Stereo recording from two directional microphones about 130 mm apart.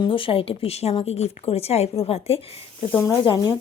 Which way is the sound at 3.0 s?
35° left (ahead or behind).